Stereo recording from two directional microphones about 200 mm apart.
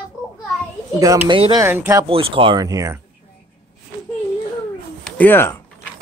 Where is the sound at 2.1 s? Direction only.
25° right (ahead or behind).